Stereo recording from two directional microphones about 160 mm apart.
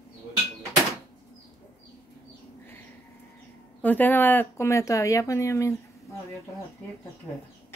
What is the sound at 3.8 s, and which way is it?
Speech, 10° left (ahead or behind).